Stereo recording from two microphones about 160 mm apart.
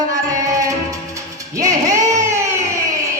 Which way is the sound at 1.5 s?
20° right (ahead or behind).